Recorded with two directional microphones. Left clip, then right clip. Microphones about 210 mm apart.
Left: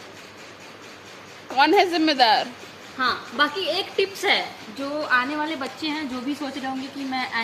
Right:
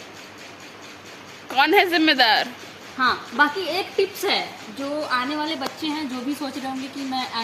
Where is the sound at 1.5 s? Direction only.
Centre (ahead or behind).